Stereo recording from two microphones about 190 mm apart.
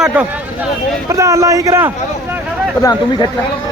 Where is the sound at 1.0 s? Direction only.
15° right (ahead or behind).